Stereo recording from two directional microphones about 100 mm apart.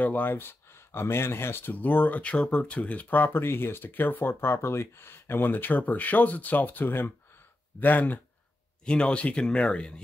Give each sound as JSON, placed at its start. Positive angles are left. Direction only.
{"t": 0.0, "sound": "speech", "side_deg": 20}